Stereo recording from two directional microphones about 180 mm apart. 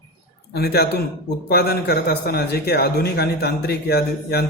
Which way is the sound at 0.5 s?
65° left (ahead or behind).